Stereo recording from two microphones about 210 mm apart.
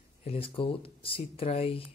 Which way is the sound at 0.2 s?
25° left (ahead or behind).